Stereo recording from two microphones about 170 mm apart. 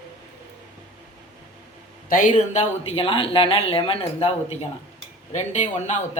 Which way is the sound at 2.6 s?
30° left (ahead or behind).